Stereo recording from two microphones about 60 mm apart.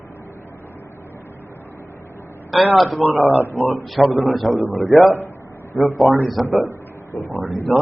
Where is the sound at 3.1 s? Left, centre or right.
Right.